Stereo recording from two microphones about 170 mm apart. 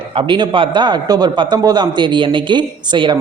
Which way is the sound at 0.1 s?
30° right (ahead or behind).